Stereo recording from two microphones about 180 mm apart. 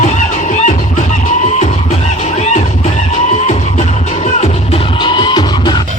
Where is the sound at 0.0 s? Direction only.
45° left (ahead or behind); by 5.8 s 25° left (ahead or behind).